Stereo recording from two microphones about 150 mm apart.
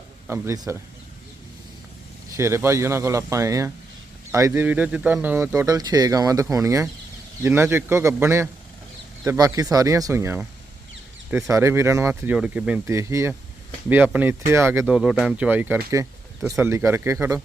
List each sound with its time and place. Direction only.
0.3 s speech: 20° right (ahead or behind)
2.3 s a man's voice: 20° right (ahead or behind)
12.9 s a man's voice: 20° right (ahead or behind)